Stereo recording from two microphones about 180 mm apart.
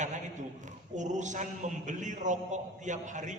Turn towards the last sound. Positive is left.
turn(degrees=-45)  # may be behind; listen again after turning